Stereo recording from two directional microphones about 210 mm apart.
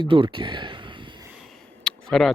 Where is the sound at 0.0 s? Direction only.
25° right (ahead or behind).